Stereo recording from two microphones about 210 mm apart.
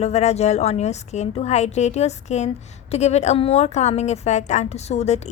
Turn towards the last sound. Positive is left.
turn(degrees=30)  # may be behind; listen again after turning